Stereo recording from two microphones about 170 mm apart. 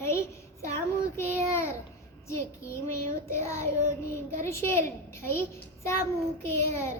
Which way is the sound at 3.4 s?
15° left (ahead or behind).